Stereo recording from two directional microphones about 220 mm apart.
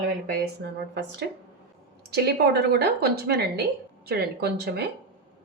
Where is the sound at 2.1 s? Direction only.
45° right (ahead or behind).